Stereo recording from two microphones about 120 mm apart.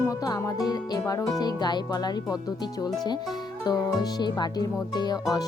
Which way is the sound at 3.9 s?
35° left (ahead or behind).